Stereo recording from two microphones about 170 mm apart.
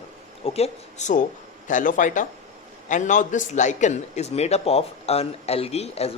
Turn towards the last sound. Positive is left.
turn(degrees=40)  # may be behind; listen again after turning